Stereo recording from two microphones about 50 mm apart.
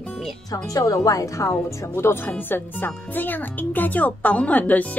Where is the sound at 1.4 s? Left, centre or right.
Left.